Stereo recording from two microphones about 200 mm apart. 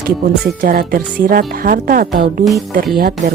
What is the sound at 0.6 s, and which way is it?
Speech, 45° right (ahead or behind).